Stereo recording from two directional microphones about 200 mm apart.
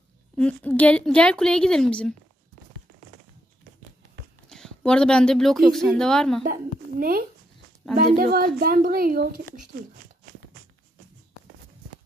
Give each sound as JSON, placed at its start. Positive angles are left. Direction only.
{"t": 0.4, "sound": "a woman's voice", "side_deg": 5}
{"t": 4.5, "sound": "a woman's voice", "side_deg": 5}
{"t": 6.4, "sound": "a woman's voice", "side_deg": -45}